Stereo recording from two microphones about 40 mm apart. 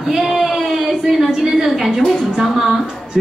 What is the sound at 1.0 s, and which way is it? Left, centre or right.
Speech, centre.